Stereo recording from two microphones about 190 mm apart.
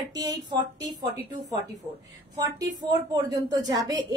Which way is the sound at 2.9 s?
20° right (ahead or behind).